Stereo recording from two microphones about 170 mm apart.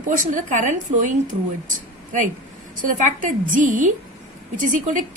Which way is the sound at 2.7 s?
50° right (ahead or behind).